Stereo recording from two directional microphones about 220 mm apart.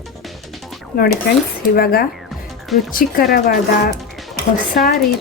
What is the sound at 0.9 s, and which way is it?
Speech, 40° left (ahead or behind).